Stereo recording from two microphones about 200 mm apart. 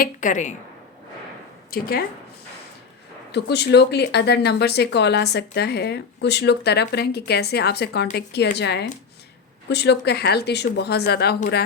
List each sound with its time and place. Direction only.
0.0 s a woman's voice: 40° left (ahead or behind)
1.7 s a woman's voice: 50° left (ahead or behind)
3.3 s a woman's voice: 60° left (ahead or behind)